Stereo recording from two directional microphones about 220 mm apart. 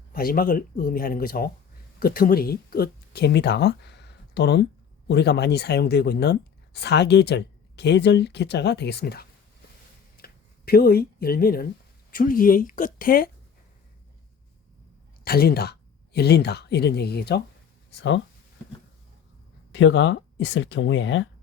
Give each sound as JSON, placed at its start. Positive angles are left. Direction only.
{"t": 0.1, "sound": "speech", "side_deg": 40}
{"t": 15.2, "sound": "speech", "side_deg": 45}
{"t": 19.7, "sound": "speech", "side_deg": 60}